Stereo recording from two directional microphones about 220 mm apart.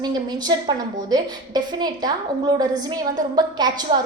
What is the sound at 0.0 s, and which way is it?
A woman's voice, 20° right (ahead or behind).